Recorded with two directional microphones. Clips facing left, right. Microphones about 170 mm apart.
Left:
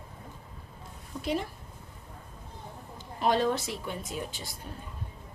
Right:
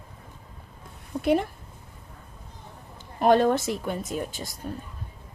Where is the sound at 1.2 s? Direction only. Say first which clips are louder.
Right 8 dB; 55° right (ahead or behind).